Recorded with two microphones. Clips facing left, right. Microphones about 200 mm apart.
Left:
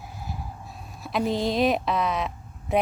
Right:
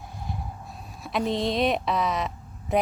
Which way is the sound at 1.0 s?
Centre (ahead or behind).